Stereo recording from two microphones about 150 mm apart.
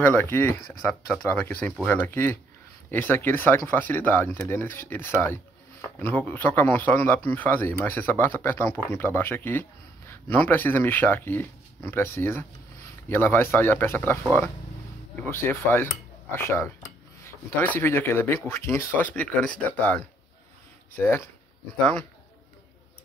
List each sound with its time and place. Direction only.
0.0 s speech: 15° left (ahead or behind)